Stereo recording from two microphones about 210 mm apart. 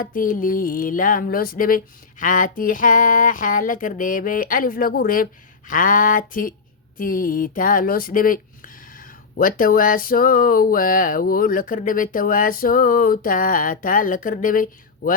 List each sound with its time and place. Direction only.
0.0 s speech: 40° left (ahead or behind)